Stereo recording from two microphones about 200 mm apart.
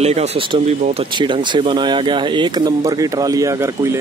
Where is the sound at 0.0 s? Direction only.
35° right (ahead or behind).